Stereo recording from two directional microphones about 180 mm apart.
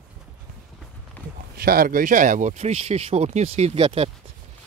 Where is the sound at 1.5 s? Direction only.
55° right (ahead or behind); by 4.1 s 30° right (ahead or behind).